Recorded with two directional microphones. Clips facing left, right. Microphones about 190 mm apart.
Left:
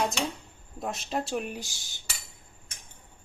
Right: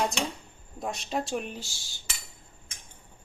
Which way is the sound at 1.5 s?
15° left (ahead or behind).